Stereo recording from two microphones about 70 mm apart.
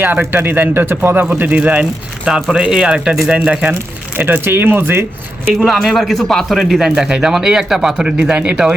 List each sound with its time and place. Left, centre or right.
0.0 s speech: right
4.2 s speech: right
5.5 s speech: centre